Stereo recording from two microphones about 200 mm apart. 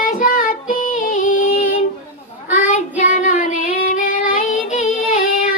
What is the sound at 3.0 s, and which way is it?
Child singing, 40° left (ahead or behind).